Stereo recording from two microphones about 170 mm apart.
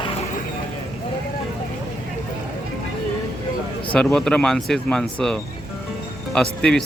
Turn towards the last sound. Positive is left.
turn(degrees=5)  # may be behind; listen again after turning